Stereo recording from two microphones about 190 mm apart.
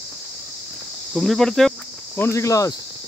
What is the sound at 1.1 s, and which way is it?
Speech, centre (ahead or behind).